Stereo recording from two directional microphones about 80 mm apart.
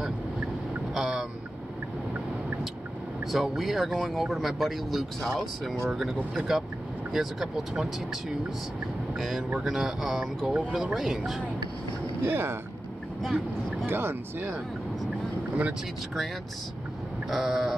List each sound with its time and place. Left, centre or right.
0.9 s vehicle: centre
3.3 s speech: centre
9.5 s speech: centre
12.2 s speech: right
13.2 s speech: centre
13.8 s speech: right
17.3 s speech: centre